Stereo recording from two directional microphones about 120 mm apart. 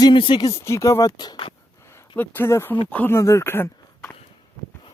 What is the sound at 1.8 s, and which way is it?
Speech, 20° left (ahead or behind).